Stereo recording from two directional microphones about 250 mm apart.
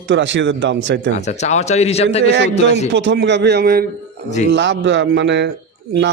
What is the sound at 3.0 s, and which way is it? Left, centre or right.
Speech, right.